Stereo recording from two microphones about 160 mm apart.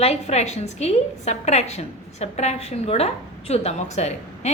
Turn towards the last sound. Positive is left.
turn(degrees=45)  # may be behind; listen again after turning